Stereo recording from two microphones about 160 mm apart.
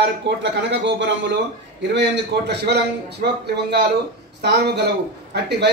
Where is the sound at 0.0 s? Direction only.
90° right.